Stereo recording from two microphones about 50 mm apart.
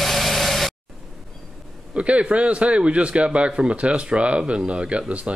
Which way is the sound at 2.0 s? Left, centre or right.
Right.